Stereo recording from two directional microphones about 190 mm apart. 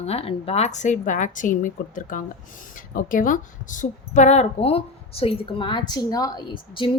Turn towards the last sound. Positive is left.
turn(degrees=25)  # may be behind; listen again after turning